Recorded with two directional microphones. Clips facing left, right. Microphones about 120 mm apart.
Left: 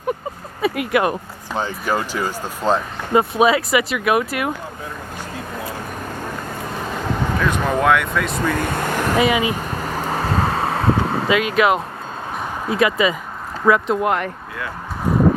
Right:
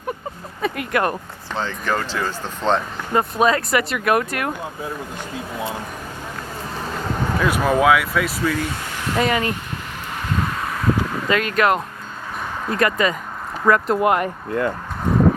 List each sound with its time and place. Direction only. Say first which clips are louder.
0.6 s speech: left 3 dB; 5° left (ahead or behind)
7.3 s speech: right 3 dB; 10° right (ahead or behind)
8.5 s vehicle: left 5 dB; 55° left (ahead or behind)
9.1 s speech: left 1 dB; 5° left (ahead or behind)
9.6 s vehicle: left 7 dB; 40° left (ahead or behind)
11.3 s speech: left 1 dB; 5° left (ahead or behind)